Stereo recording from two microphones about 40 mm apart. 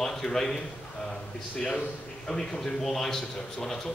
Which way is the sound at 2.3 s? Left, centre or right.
Centre.